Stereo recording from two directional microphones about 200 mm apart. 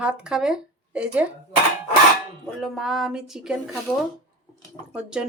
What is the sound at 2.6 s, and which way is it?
Speech, centre (ahead or behind).